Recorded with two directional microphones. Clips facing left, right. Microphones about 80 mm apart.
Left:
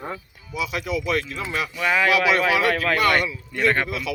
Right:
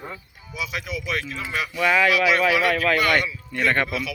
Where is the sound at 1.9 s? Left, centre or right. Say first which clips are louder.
Left 1 dB; left.